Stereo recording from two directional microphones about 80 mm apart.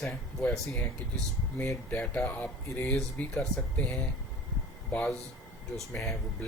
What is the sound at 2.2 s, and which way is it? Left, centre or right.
Speech, left.